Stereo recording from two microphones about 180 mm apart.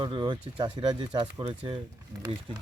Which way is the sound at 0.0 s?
25° right (ahead or behind).